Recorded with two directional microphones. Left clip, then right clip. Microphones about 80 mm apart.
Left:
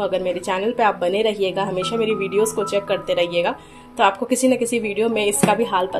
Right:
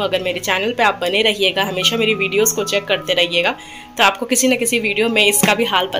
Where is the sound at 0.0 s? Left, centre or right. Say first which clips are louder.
Right 3 dB; centre.